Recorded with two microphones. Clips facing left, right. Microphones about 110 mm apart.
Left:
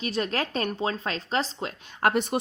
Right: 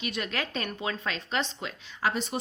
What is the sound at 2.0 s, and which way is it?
Speech, 55° left (ahead or behind).